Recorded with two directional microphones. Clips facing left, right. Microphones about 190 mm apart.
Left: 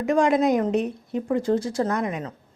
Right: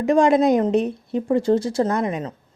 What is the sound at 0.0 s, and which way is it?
A woman's voice, 30° right (ahead or behind).